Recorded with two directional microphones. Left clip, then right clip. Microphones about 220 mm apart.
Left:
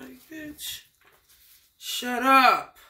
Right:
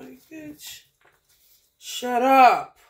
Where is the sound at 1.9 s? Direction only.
15° left (ahead or behind).